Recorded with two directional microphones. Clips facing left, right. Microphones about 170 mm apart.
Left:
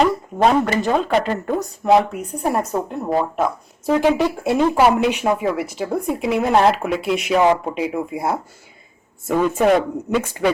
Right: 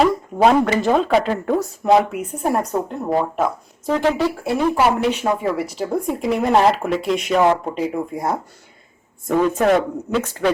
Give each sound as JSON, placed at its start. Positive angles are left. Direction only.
{"t": 0.0, "sound": "speech", "side_deg": -5}
{"t": 3.9, "sound": "speech", "side_deg": 15}